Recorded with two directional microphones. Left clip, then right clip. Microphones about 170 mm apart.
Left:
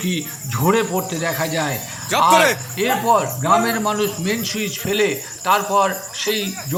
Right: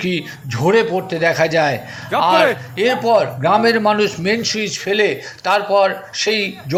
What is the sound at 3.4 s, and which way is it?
Speech, 15° right (ahead or behind).